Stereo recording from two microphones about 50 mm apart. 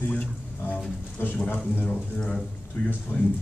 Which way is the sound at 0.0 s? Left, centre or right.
Left.